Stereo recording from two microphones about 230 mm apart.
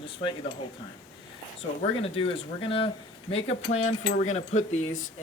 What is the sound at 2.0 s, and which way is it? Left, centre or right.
Speech, left.